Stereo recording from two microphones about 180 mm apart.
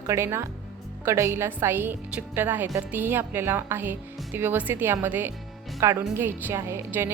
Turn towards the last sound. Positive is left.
turn(degrees=-15)  # may be behind; listen again after turning